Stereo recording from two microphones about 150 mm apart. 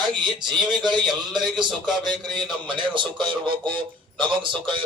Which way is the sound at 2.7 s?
30° right (ahead or behind).